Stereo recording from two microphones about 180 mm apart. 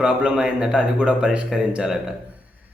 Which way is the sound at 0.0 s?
5° right (ahead or behind).